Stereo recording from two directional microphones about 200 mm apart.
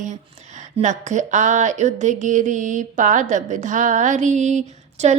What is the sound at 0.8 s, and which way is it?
Speech, 35° right (ahead or behind).